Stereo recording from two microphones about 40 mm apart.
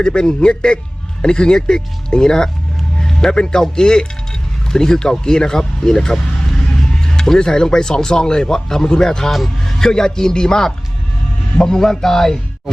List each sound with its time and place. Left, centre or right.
0.0 s a man's voice: left
7.2 s speech: centre
9.3 s a man's voice: centre
9.8 s speech: centre